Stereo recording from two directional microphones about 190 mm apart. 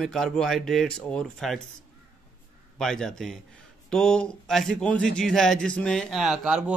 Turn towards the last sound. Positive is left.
turn(degrees=-5)  # may be behind; listen again after turning